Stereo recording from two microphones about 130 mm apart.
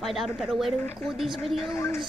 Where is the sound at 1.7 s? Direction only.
20° left (ahead or behind).